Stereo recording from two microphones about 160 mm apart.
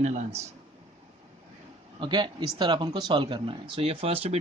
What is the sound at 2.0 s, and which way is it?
Speech, 30° right (ahead or behind).